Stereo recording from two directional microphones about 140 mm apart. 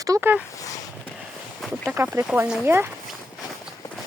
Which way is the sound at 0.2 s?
10° right (ahead or behind).